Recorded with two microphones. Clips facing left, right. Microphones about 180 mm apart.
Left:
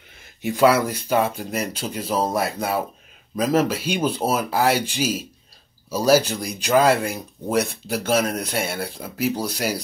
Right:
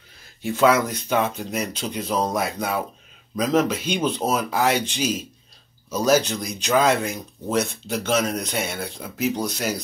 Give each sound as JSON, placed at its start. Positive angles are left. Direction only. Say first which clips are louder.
{"t": 0.4, "sound": "speech", "louder": "left 1 dB", "side_deg": 10}